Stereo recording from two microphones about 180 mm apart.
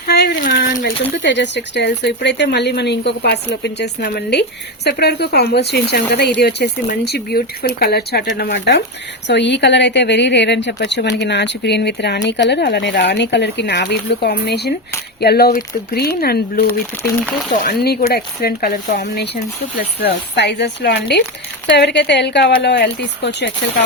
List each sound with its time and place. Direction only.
0.1 s speech: 65° left (ahead or behind)